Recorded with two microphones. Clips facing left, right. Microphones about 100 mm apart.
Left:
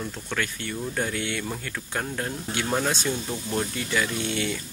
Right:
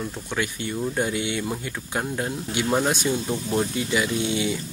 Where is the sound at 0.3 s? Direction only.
15° right (ahead or behind).